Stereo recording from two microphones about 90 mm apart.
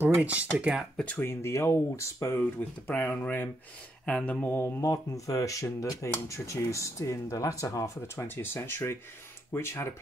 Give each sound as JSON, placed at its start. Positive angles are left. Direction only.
{"t": 0.0, "sound": "speech", "side_deg": -20}
{"t": 0.9, "sound": "speech", "side_deg": 15}
{"t": 1.2, "sound": "speech", "side_deg": 30}
{"t": 2.9, "sound": "speech", "side_deg": 20}
{"t": 4.9, "sound": "speech", "side_deg": 40}